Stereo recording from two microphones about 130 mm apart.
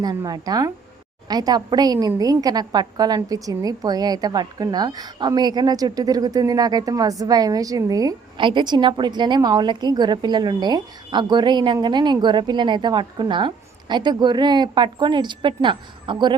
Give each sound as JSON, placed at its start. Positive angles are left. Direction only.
{"t": 0.0, "sound": "a woman's voice", "side_deg": -30}
{"t": 8.4, "sound": "a woman's voice", "side_deg": -40}